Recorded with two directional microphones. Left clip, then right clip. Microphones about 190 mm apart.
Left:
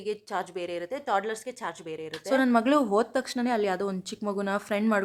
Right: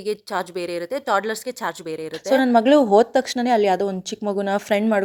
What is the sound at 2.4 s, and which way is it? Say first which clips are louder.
A woman's voice: right 8 dB; 20° right (ahead or behind).